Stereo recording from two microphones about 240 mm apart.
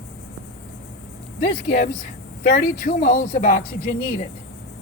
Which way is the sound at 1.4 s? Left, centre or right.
Left.